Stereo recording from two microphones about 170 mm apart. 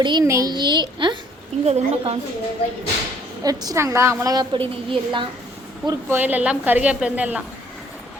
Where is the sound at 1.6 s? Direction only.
40° right (ahead or behind).